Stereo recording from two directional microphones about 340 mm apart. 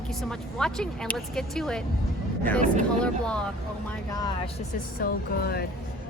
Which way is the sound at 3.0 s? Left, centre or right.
Centre.